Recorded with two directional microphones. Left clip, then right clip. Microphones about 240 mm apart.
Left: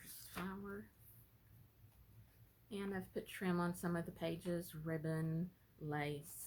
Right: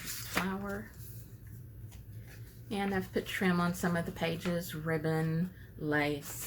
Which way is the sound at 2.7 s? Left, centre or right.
Left.